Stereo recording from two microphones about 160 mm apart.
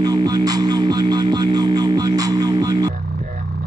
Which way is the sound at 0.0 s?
25° right (ahead or behind).